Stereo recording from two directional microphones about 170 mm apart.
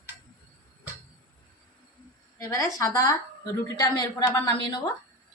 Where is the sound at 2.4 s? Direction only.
20° left (ahead or behind).